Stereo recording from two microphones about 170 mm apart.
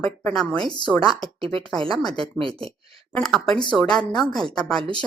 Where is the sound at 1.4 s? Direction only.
30° right (ahead or behind).